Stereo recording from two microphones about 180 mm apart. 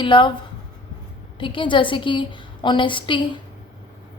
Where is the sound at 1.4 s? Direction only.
25° left (ahead or behind).